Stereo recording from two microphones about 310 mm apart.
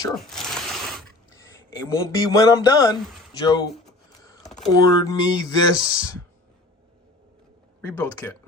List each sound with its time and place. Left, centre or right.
0.3 s a sound: centre
1.9 s speech: centre
4.7 s speech: centre
7.8 s speech: centre